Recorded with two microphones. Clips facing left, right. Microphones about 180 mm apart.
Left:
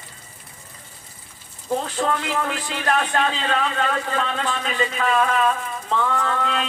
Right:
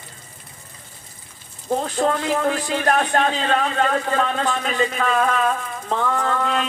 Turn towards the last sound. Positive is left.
turn(degrees=-40)  # may be behind; listen again after turning